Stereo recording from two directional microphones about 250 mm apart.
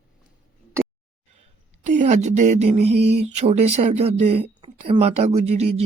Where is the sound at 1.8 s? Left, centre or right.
Right.